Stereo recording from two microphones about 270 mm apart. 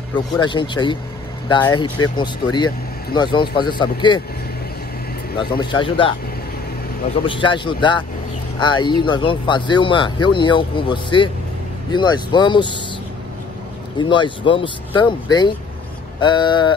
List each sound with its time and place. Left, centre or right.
0.1 s speech: centre
5.4 s speech: centre
7.2 s speech: centre
13.9 s speech: centre